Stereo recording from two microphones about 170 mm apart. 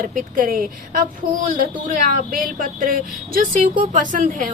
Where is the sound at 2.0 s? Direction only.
55° right (ahead or behind).